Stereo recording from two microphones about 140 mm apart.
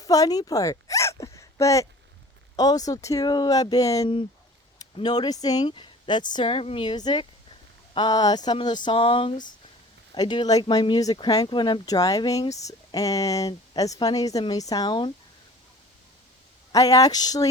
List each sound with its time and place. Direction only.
0.0 s speech: 25° left (ahead or behind)
16.7 s speech: 25° left (ahead or behind)